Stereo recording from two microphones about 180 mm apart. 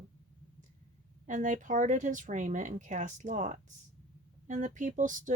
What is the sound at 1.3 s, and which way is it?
Speech, 45° right (ahead or behind).